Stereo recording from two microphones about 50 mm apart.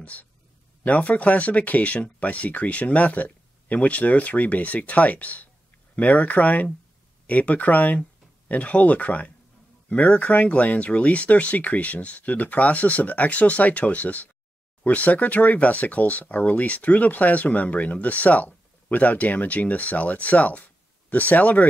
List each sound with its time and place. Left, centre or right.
0.0 s speech: left